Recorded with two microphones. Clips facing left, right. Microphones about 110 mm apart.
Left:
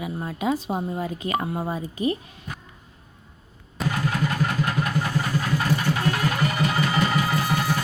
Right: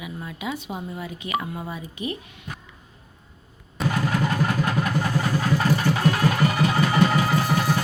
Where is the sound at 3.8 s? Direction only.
Centre (ahead or behind).